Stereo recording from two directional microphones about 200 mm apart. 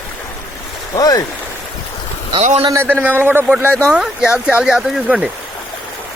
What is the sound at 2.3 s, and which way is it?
Speech, 30° right (ahead or behind).